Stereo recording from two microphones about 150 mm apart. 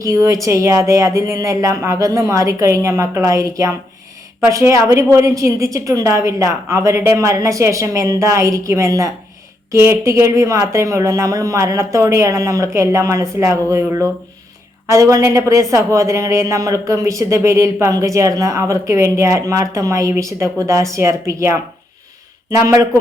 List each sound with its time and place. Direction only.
0.0 s speech: 20° right (ahead or behind)